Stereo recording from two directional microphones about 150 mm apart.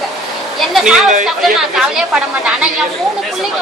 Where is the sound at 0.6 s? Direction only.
Centre (ahead or behind).